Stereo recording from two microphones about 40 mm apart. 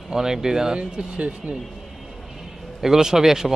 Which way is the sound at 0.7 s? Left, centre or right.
Right.